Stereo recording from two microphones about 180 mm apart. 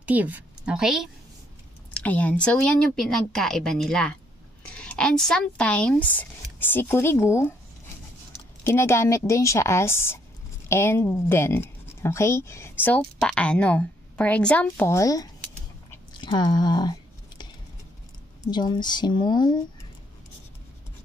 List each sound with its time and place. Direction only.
0.0 s a woman's voice: 10° right (ahead or behind); by 7.5 s 15° left (ahead or behind)
8.6 s speech: 15° left (ahead or behind)
16.1 s chewing: 25° left (ahead or behind)
18.5 s speech: 25° left (ahead or behind)